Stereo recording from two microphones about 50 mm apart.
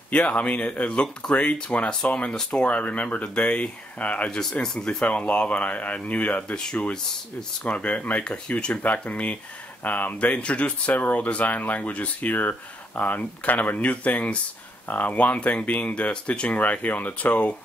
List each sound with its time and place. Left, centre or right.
0.1 s speech: left
4.3 s speech: centre
5.0 s speech: left
6.6 s speech: centre
7.6 s speech: left